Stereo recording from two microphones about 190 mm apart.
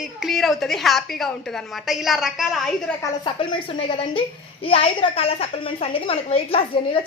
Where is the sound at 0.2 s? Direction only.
Centre (ahead or behind).